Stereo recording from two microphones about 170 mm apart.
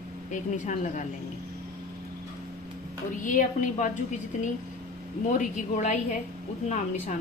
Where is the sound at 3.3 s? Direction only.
50° left (ahead or behind).